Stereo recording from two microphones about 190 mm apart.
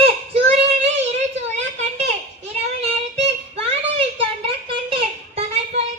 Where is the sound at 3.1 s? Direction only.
30° right (ahead or behind).